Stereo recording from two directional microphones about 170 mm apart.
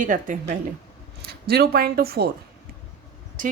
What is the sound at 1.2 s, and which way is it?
Speech, 65° right (ahead or behind).